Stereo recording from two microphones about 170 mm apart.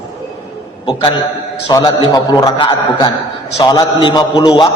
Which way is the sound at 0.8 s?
25° left (ahead or behind).